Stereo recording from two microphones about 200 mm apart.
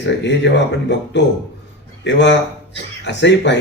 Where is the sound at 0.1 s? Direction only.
60° left (ahead or behind).